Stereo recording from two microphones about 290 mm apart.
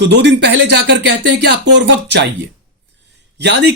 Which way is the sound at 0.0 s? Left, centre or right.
Right.